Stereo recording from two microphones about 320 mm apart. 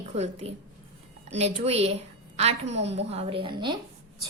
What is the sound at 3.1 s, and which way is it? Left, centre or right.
Speech, centre.